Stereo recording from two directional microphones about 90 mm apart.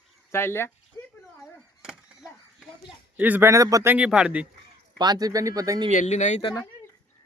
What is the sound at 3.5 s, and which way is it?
Speech, 35° right (ahead or behind).